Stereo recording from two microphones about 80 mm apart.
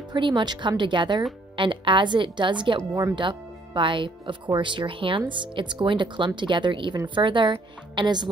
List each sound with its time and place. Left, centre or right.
0.1 s speech: right
1.6 s speech: right
2.8 s speech: right
3.2 s speech: right